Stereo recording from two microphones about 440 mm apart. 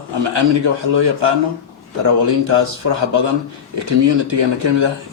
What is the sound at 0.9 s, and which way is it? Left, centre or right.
Speech, right.